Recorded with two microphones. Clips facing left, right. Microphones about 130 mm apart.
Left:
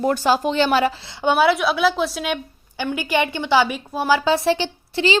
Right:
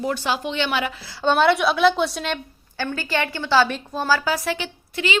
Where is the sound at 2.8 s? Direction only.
15° left (ahead or behind).